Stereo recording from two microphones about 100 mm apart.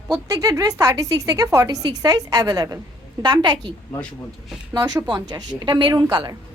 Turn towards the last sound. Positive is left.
turn(degrees=-45)  # may be behind; listen again after turning